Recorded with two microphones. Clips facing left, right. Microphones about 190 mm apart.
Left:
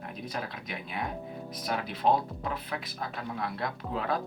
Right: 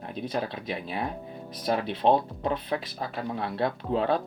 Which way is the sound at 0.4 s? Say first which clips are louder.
Right 6 dB; 30° right (ahead or behind).